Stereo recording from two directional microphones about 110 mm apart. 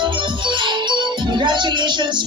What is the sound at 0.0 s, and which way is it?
Music, 45° right (ahead or behind).